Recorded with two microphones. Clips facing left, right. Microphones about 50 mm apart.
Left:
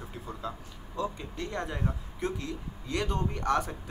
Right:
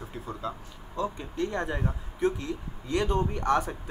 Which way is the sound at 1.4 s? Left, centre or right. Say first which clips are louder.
Right 4 dB; centre.